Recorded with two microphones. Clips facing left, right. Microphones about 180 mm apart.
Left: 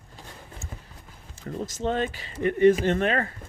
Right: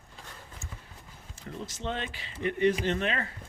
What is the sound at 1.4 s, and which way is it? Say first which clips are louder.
Speech: left 7 dB; 45° left (ahead or behind).